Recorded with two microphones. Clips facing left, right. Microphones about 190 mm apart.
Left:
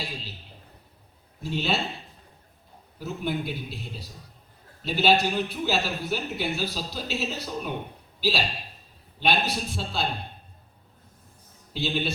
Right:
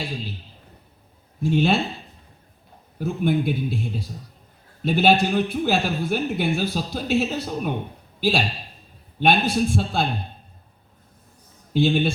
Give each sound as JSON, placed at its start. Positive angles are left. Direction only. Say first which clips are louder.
{"t": 1.4, "sound": "speech", "louder": "right 8 dB", "side_deg": -50}
{"t": 3.0, "sound": "speech", "louder": "right 8 dB", "side_deg": -50}
{"t": 11.7, "sound": "speech", "louder": "right 9 dB", "side_deg": -50}